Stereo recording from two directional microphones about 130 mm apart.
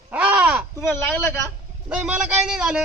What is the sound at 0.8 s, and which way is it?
Speech, 15° left (ahead or behind).